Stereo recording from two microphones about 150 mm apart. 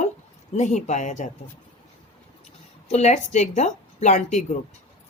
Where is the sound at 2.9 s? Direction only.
45° left (ahead or behind).